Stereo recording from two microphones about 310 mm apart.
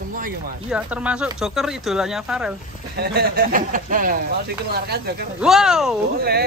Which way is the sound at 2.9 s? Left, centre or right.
Right.